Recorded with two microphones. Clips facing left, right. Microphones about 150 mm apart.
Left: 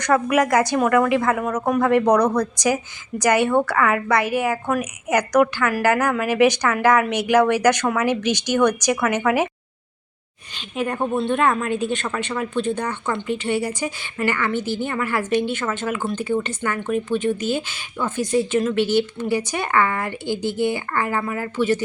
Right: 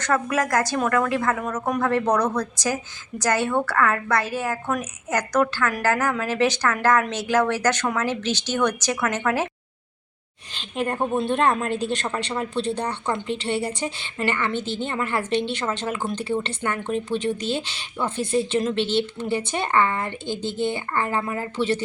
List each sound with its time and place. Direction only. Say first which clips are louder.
0.0 s a woman's voice: left 5 dB; 15° left (ahead or behind)
11.2 s a woman's voice: left 2 dB; 35° right (ahead or behind)
16.0 s speech: left 2 dB; centre (ahead or behind)
16.4 s a woman's voice: left 2 dB; 30° right (ahead or behind)